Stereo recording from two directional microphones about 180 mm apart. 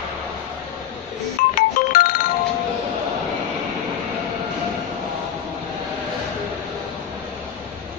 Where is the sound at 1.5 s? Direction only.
50° left (ahead or behind).